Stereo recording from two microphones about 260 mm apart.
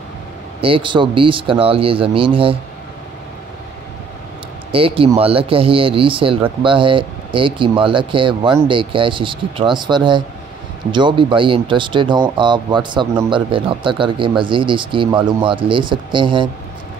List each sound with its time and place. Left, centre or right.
0.6 s speech: centre
4.7 s speech: right